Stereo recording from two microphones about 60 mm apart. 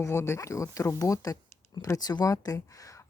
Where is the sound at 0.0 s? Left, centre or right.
Left.